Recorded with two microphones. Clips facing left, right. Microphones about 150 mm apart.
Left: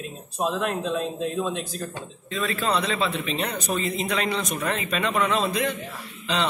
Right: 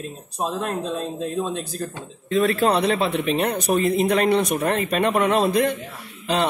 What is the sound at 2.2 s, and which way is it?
A man's voice, 60° right (ahead or behind).